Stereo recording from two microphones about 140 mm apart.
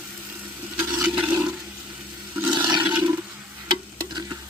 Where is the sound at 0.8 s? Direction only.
10° right (ahead or behind).